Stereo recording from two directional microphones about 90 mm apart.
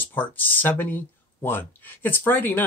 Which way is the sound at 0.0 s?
20° left (ahead or behind).